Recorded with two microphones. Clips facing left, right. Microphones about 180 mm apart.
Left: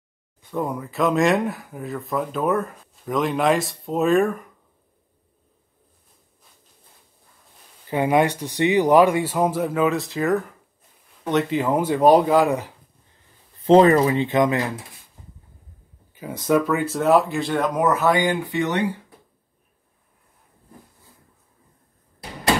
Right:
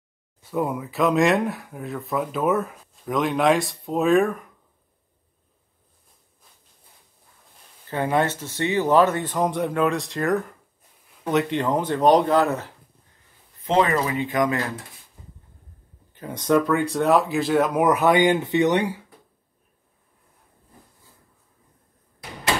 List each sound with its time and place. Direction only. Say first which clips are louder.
0.4 s speech: right 1 dB; 5° right (ahead or behind)
7.9 s speech: left 3 dB; 15° left (ahead or behind)
13.6 s speech: left 7 dB; 35° left (ahead or behind)
16.1 s speech: even; 5° left (ahead or behind); by 18.9 s 20° right (ahead or behind)